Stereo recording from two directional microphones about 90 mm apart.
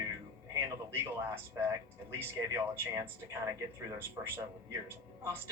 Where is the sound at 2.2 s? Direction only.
25° right (ahead or behind).